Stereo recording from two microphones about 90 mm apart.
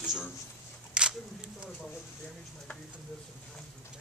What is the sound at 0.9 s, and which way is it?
Speech, 10° right (ahead or behind).